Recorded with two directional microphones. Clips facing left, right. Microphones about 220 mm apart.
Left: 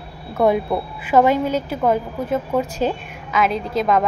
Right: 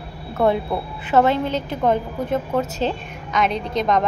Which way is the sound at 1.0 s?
10° left (ahead or behind).